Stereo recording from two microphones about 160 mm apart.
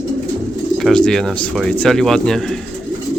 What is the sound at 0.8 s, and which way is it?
Speech, 5° left (ahead or behind).